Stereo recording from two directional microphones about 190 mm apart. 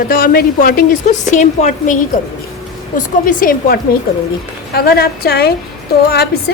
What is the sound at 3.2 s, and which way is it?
A woman's voice, 45° left (ahead or behind).